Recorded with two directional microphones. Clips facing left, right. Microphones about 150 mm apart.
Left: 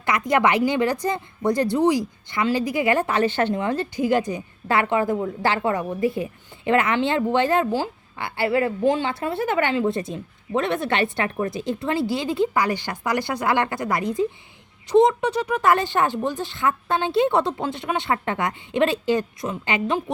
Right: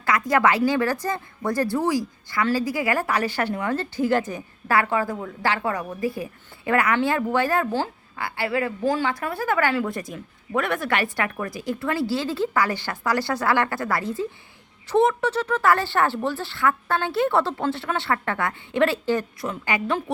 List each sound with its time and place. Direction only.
0.0 s a woman's voice: 20° left (ahead or behind)